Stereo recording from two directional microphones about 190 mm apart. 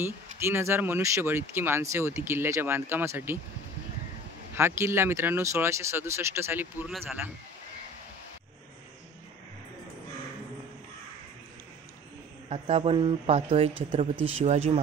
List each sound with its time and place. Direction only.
0.0 s speech: 10° right (ahead or behind)
4.6 s speech: 10° right (ahead or behind)
6.9 s speech: centre (ahead or behind)
12.4 s speech: 30° right (ahead or behind)